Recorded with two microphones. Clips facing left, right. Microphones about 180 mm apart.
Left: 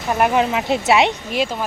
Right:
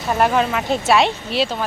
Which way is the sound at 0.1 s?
15° left (ahead or behind).